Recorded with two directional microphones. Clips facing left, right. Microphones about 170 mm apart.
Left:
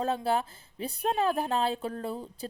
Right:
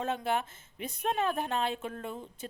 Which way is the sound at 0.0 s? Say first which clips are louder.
Left 3 dB; 35° left (ahead or behind).